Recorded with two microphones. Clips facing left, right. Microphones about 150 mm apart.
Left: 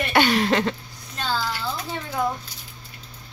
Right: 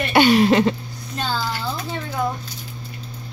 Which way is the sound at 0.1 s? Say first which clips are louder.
Right 6 dB; 10° right (ahead or behind).